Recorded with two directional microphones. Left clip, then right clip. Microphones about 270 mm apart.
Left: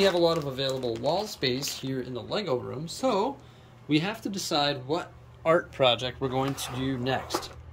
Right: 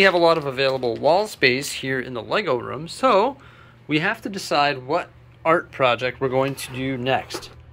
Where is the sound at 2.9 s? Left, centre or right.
Centre.